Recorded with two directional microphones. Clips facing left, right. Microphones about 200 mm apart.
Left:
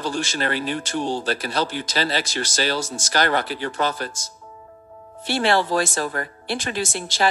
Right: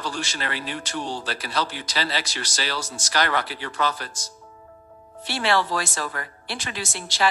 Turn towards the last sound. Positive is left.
turn(degrees=50)  # may be behind; listen again after turning